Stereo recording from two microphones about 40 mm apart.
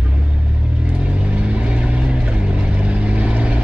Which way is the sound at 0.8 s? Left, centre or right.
Right.